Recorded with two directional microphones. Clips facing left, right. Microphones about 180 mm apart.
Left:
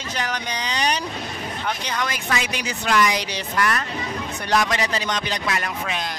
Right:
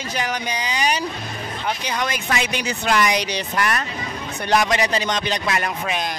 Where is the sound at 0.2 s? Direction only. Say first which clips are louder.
Right 2 dB; 10° right (ahead or behind).